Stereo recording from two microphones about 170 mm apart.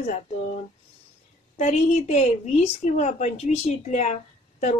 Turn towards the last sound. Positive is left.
turn(degrees=45)  # may be behind; listen again after turning